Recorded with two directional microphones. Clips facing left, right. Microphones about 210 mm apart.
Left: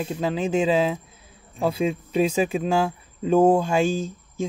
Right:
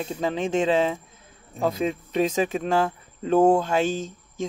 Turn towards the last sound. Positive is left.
turn(degrees=10)  # may be behind; listen again after turning